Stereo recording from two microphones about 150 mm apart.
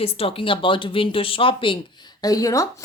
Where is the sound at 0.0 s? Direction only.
40° left (ahead or behind).